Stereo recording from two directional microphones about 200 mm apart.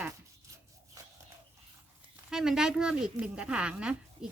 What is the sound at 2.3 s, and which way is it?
Speech, centre (ahead or behind).